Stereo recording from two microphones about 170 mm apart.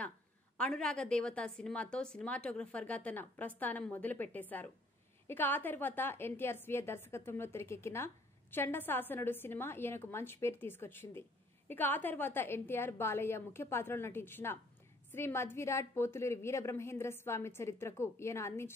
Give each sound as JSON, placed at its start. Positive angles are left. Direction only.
{"t": 0.6, "sound": "a woman's voice", "side_deg": 5}